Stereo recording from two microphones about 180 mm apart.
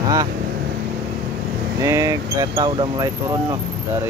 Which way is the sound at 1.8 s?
15° right (ahead or behind).